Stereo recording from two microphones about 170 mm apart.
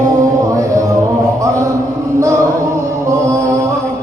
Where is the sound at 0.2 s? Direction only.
20° right (ahead or behind).